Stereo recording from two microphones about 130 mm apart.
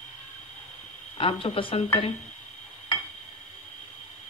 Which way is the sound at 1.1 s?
45° left (ahead or behind).